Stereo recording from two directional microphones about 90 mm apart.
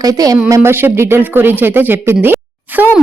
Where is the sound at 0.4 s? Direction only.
30° right (ahead or behind).